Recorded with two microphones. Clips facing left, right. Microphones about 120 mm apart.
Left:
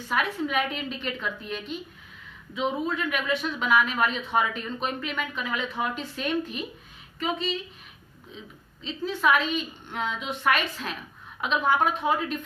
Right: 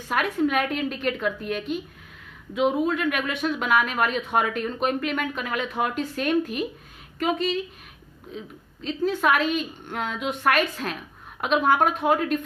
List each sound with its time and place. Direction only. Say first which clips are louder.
0.1 s a woman's voice: right 4 dB; 50° right (ahead or behind)
2.5 s speech: right 6 dB; 10° right (ahead or behind)
2.9 s a woman's voice: right 2 dB; 50° right (ahead or behind)
8.8 s a woman's voice: right 3 dB; 50° right (ahead or behind)